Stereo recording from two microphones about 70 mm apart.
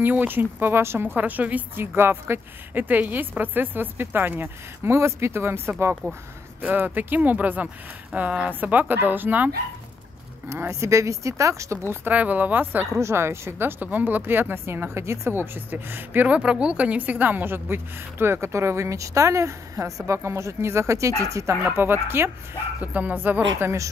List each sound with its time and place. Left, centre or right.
0.0 s a woman's voice: right
2.0 s a woman's voice: right
6.6 s a woman's voice: right
10.5 s speech: right
12.1 s a woman's voice: right
13.0 s a woman's voice: right
16.3 s a woman's voice: centre; by 21.5 s right
21.6 s a woman's voice: right
22.8 s a woman's voice: right